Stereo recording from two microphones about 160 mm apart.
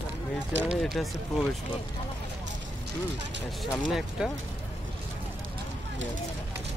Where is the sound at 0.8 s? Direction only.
Centre (ahead or behind).